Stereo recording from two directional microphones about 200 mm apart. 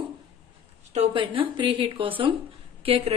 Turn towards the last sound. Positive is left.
turn(degrees=-30)  # may be behind; listen again after turning